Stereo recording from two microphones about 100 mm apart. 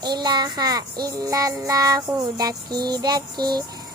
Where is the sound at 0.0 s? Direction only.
45° right (ahead or behind).